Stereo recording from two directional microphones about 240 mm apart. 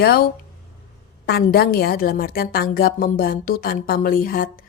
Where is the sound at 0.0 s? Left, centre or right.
Left.